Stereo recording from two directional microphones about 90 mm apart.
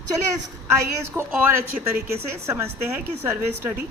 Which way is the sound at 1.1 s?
25° right (ahead or behind).